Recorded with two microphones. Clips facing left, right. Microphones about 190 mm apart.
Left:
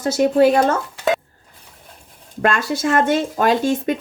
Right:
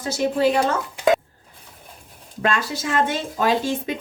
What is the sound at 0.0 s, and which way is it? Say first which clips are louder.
Speech: left 6 dB; 50° left (ahead or behind).